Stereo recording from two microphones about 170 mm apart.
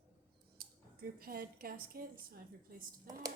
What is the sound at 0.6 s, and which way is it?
Cutlery, 65° right (ahead or behind).